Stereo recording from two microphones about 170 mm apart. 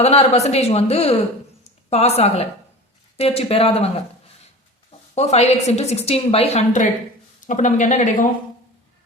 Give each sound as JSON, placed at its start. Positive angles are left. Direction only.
{"t": 0.0, "sound": "a woman's voice", "side_deg": 35}